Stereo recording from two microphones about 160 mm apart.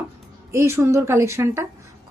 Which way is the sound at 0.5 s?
15° right (ahead or behind).